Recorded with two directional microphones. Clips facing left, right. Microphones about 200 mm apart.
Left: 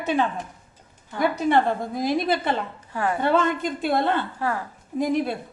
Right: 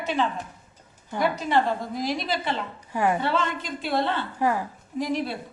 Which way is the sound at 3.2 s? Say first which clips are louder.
Left 5 dB; 50° left (ahead or behind).